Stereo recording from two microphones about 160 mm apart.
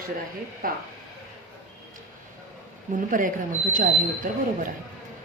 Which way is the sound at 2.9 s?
55° right (ahead or behind).